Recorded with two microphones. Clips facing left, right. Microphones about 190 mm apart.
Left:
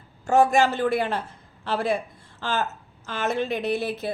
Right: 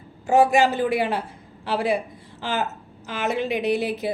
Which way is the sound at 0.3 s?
10° right (ahead or behind).